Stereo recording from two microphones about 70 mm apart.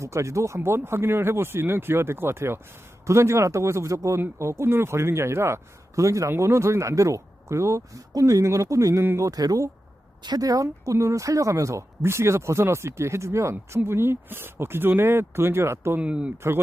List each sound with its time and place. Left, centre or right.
0.0 s speech: right
16.0 s speech: centre